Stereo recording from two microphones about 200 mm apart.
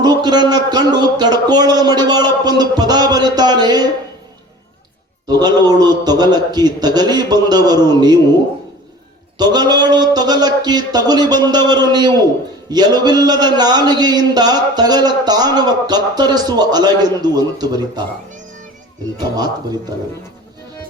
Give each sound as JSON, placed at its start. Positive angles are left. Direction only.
{"t": 0.0, "sound": "a man's voice", "side_deg": -20}
{"t": 5.3, "sound": "a man's voice", "side_deg": -20}
{"t": 9.4, "sound": "a man's voice", "side_deg": -20}